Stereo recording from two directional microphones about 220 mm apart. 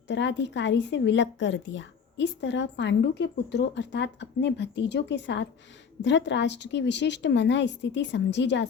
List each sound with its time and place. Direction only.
0.1 s speech: 55° left (ahead or behind)